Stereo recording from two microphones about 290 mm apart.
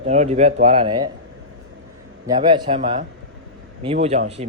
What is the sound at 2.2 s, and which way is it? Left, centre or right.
Speech, centre.